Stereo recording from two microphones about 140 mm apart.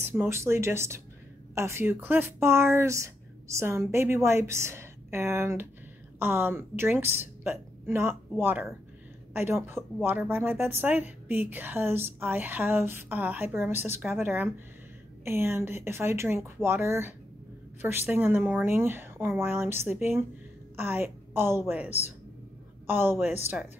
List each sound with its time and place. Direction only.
0.0 s a woman's voice: 15° right (ahead or behind)